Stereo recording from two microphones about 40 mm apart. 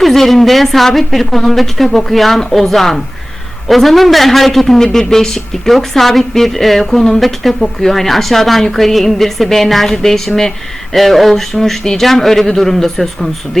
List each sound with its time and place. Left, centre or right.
0.0 s a man's voice: centre